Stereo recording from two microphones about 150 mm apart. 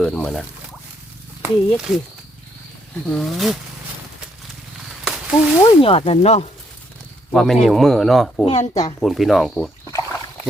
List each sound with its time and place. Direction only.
0.0 s speech: 5° left (ahead or behind)
3.1 s speech: centre (ahead or behind)
5.0 s a sound: 5° right (ahead or behind)
5.8 s speech: 40° left (ahead or behind)
7.3 s speech: centre (ahead or behind)
8.4 s speech: 50° left (ahead or behind)
9.0 s speech: centre (ahead or behind)
9.8 s rowboat: 20° left (ahead or behind)